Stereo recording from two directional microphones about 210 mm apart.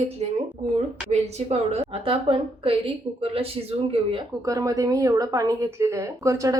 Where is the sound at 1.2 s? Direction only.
30° right (ahead or behind).